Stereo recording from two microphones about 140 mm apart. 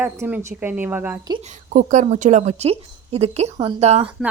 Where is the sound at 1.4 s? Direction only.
65° right (ahead or behind); by 4.1 s 50° right (ahead or behind).